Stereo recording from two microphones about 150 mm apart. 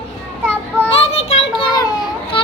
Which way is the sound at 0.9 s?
40° left (ahead or behind).